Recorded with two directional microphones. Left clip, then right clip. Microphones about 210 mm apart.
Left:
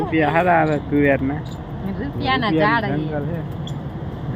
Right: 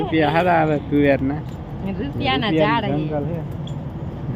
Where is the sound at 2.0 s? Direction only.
30° right (ahead or behind).